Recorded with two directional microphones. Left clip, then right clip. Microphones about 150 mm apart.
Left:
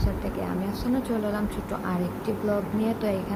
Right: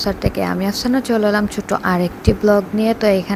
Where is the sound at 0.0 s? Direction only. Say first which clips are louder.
Right 12 dB; 70° right (ahead or behind).